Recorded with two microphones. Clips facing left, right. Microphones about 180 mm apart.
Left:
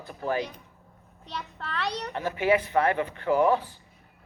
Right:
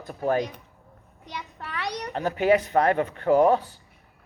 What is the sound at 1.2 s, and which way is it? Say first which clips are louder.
Speech: even; 15° right (ahead or behind).